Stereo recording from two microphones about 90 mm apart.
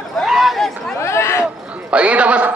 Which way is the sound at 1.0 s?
30° left (ahead or behind).